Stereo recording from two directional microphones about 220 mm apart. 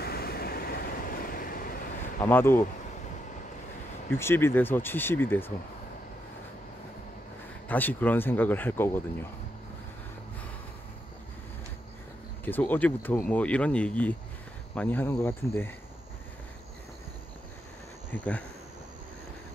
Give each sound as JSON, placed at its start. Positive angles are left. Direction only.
{"t": 0.0, "sound": "train", "side_deg": 45}
{"t": 2.1, "sound": "speech", "side_deg": 10}
{"t": 4.1, "sound": "speech", "side_deg": 10}
{"t": 7.6, "sound": "speech", "side_deg": 10}
{"t": 12.4, "sound": "speech", "side_deg": 10}
{"t": 18.1, "sound": "speech", "side_deg": 5}